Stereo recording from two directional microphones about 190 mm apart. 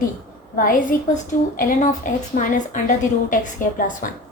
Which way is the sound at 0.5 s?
50° left (ahead or behind).